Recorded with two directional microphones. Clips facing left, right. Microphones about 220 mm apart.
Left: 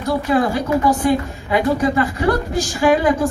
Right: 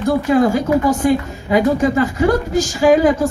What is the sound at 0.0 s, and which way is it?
A woman's voice, 45° right (ahead or behind).